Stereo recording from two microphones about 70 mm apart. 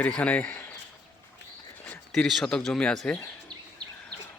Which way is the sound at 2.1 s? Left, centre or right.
Centre.